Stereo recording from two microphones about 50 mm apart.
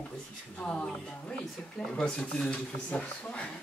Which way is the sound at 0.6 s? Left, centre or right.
Left.